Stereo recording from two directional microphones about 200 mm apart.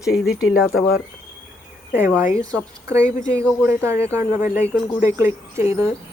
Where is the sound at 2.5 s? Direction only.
15° right (ahead or behind).